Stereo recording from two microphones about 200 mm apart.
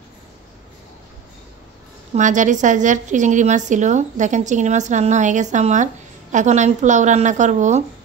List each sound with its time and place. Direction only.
2.1 s a woman's voice: 40° right (ahead or behind)